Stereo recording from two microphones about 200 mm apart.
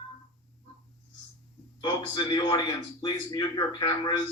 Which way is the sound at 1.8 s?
20° left (ahead or behind).